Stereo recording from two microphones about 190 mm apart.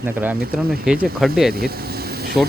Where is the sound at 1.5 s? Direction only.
55° right (ahead or behind).